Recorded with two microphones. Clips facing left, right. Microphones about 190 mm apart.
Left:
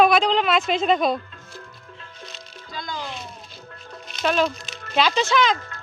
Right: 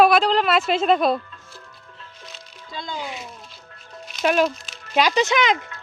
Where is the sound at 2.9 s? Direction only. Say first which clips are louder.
Right 1 dB; 5° right (ahead or behind).